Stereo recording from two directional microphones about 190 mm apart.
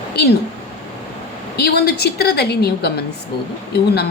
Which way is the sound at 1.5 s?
60° left (ahead or behind).